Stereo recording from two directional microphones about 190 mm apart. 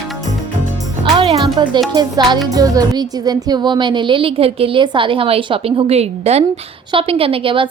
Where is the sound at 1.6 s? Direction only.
25° right (ahead or behind).